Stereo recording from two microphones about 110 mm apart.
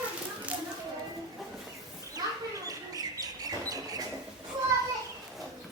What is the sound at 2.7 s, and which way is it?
Bird, 35° right (ahead or behind).